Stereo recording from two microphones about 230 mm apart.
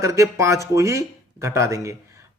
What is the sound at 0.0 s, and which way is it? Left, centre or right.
Speech, centre.